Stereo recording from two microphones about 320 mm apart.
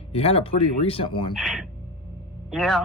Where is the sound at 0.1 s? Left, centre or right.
Centre.